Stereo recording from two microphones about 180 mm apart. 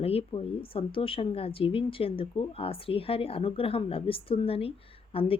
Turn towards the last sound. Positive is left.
turn(degrees=30)  # may be behind; listen again after turning